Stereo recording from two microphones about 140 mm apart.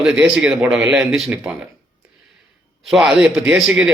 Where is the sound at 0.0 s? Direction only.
Centre (ahead or behind).